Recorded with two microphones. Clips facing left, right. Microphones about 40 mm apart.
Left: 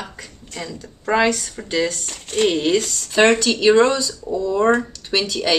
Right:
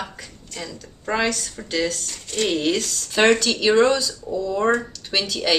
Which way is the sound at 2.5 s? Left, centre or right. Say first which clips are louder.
Left 3 dB; centre.